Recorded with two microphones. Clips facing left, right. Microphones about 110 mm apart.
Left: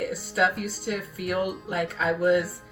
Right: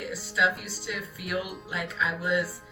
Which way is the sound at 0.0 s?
50° left (ahead or behind).